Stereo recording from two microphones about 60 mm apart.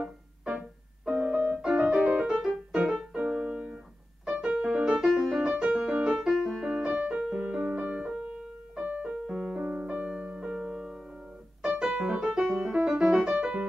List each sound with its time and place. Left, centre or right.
0.0 s keyboard: centre
1.6 s music: centre
2.9 s keyboard: centre
4.3 s music: centre
8.8 s piano: right
9.1 s music: centre
11.8 s piano: centre
12.8 s music: centre